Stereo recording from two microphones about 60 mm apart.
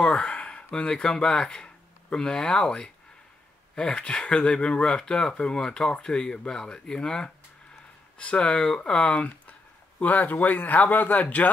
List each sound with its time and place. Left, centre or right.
0.0 s a sound: centre
0.4 s speech: centre
9.2 s speech: left